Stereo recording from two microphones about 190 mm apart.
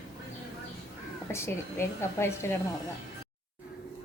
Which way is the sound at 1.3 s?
15° left (ahead or behind).